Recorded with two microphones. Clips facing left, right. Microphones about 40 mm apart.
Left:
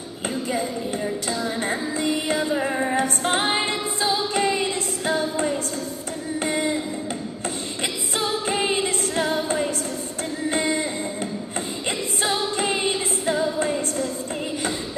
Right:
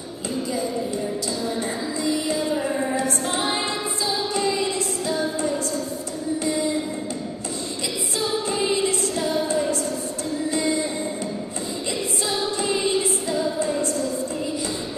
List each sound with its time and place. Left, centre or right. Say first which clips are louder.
0.5 s speech: even; left
1.0 s music: even; left
2.5 s music: left 1 dB; left
3.0 s music: left 2 dB; left
7.8 s music: left 1 dB; left
12.2 s music: left 3 dB; left